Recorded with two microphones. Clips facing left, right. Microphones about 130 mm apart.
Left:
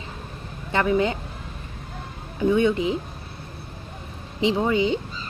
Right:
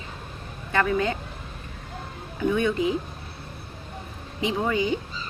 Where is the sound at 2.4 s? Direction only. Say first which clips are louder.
Left 3 dB; 25° left (ahead or behind).